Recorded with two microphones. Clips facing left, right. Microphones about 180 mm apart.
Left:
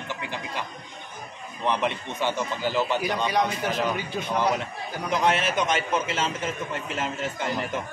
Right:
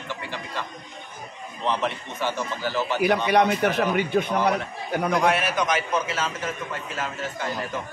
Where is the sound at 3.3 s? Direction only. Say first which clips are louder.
Right 5 dB; 65° right (ahead or behind).